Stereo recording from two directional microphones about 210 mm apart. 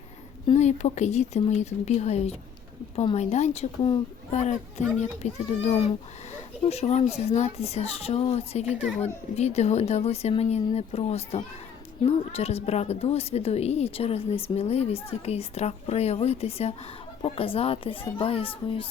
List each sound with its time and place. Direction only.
0.4 s speech: 35° left (ahead or behind)
6.7 s speech: 30° left (ahead or behind)